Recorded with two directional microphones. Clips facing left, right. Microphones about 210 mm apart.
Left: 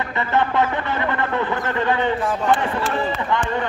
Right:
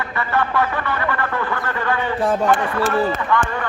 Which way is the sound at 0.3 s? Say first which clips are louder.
Left 1 dB; 20° left (ahead or behind).